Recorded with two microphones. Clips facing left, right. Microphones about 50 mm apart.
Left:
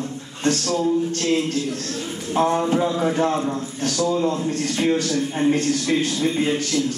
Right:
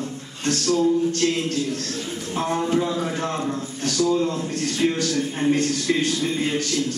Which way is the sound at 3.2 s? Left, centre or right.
Centre.